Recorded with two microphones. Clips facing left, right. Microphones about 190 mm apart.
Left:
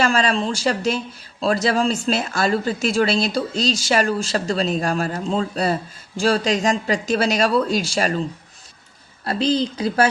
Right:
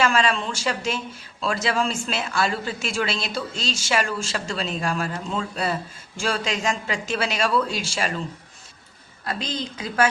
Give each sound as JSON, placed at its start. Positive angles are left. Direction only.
{"t": 0.0, "sound": "a woman's voice", "side_deg": 35}
{"t": 9.2, "sound": "a woman's voice", "side_deg": 35}